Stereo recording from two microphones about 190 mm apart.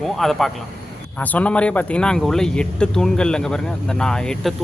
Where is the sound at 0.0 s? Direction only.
Centre (ahead or behind).